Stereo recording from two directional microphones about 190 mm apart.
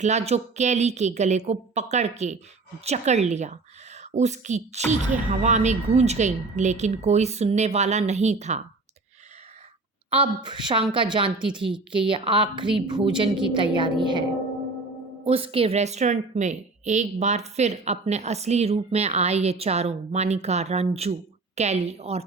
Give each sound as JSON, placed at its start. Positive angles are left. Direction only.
{"t": 0.0, "sound": "a woman's voice", "side_deg": -35}
{"t": 10.1, "sound": "a woman's voice", "side_deg": -25}